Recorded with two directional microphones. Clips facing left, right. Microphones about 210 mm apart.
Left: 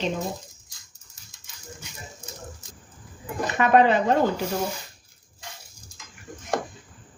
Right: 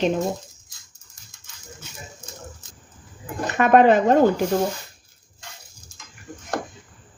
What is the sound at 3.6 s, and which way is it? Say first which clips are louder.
Speech: right 4 dB; 50° right (ahead or behind).